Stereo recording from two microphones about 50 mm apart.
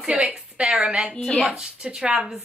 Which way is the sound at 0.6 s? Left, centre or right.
Centre.